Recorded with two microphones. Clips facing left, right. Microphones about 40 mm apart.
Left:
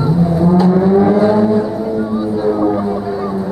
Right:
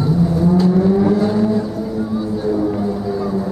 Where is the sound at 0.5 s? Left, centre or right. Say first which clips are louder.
Left 4 dB; centre.